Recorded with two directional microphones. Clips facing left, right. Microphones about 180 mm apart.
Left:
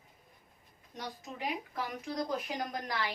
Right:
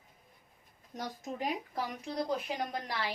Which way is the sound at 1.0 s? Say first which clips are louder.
Right 3 dB; 40° right (ahead or behind).